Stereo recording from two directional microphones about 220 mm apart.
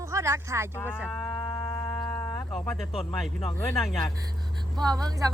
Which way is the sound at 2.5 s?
10° left (ahead or behind).